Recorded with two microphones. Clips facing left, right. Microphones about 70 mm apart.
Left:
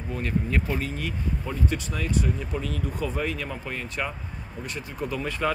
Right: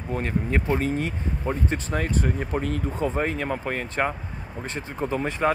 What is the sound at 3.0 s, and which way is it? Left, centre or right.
Speech, right.